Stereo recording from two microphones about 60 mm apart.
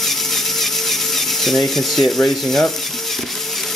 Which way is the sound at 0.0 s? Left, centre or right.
Centre.